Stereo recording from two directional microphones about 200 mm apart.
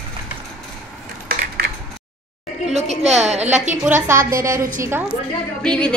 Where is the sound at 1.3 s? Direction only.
50° right (ahead or behind).